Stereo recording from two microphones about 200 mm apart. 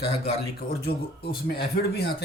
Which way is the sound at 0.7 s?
50° left (ahead or behind).